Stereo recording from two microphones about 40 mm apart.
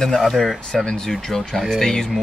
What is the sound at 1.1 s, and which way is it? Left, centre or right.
Speech, centre.